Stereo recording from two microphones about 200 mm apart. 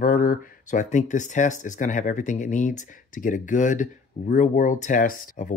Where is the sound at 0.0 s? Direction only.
45° left (ahead or behind).